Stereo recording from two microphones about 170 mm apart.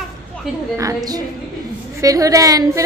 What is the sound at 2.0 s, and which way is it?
Speech, 20° right (ahead or behind).